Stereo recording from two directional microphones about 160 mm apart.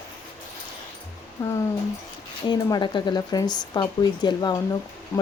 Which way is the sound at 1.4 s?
20° left (ahead or behind).